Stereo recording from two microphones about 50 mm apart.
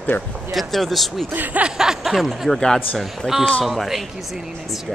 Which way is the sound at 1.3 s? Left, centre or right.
Right.